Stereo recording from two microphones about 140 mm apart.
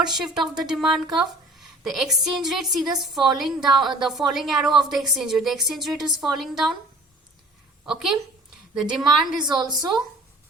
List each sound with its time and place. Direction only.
0.0 s a woman's voice: centre (ahead or behind)
7.9 s a woman's voice: centre (ahead or behind)
9.4 s a woman's voice: 30° right (ahead or behind)